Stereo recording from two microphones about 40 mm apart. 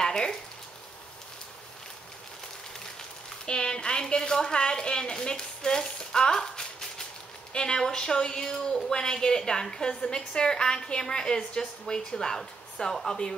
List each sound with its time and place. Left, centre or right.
0.0 s frying: centre
3.4 s a woman's voice: left